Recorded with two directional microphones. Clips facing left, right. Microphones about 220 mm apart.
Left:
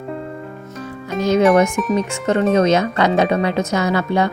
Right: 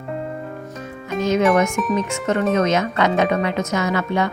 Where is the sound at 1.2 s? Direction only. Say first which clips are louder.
Left 3 dB; 35° left (ahead or behind).